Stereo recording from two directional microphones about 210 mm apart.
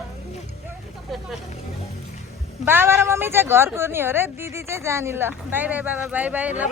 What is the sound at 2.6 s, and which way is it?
A woman's voice, 10° right (ahead or behind).